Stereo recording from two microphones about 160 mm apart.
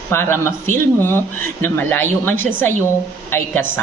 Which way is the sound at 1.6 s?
15° left (ahead or behind).